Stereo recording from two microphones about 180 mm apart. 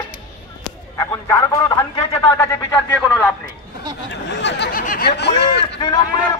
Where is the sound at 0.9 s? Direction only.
15° left (ahead or behind).